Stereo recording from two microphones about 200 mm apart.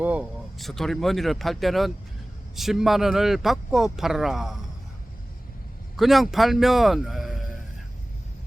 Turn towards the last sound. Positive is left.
turn(degrees=0)  # may be behind; listen again after turning